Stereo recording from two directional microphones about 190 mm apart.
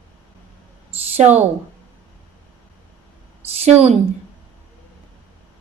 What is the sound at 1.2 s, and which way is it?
Speech, 35° right (ahead or behind).